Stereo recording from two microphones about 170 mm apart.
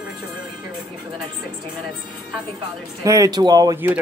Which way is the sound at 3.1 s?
20° right (ahead or behind).